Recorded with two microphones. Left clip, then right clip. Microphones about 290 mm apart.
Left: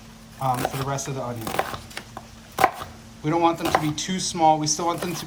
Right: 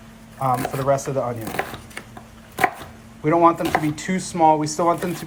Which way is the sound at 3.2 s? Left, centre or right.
Centre.